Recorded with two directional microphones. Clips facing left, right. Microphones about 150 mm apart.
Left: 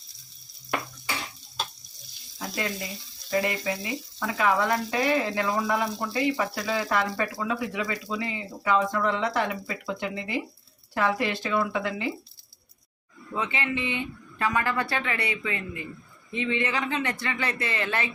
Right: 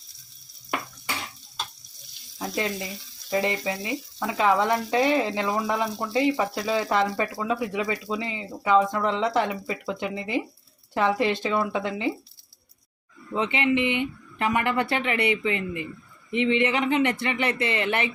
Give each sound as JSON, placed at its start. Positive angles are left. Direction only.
{"t": 2.4, "sound": "frying", "side_deg": -20}
{"t": 3.2, "sound": "speech", "side_deg": -20}
{"t": 13.3, "sound": "speech", "side_deg": -20}